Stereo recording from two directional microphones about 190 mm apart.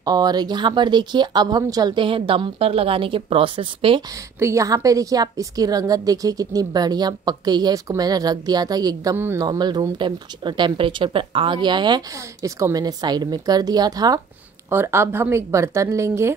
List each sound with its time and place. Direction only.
0.0 s a woman's voice: 20° right (ahead or behind)
4.4 s a woman's voice: 15° right (ahead or behind)